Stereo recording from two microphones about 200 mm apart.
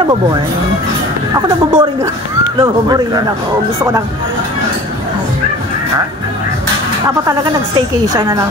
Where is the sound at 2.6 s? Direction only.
20° right (ahead or behind).